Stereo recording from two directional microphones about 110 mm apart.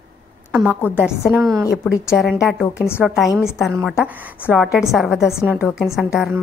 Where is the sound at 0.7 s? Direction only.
20° left (ahead or behind).